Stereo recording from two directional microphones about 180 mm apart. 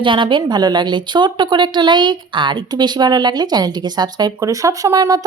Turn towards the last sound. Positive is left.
turn(degrees=-20)  # may be behind; listen again after turning